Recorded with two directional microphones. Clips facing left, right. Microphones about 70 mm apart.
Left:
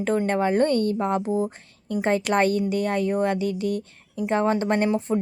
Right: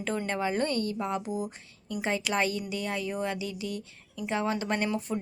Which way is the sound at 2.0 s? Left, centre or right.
Left.